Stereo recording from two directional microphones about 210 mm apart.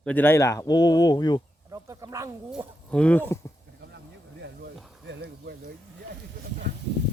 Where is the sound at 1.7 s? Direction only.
15° right (ahead or behind).